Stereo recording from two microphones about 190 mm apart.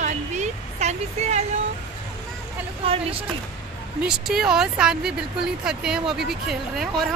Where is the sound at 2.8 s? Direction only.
30° right (ahead or behind).